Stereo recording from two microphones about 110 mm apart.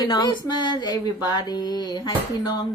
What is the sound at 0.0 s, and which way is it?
Speech, 40° left (ahead or behind).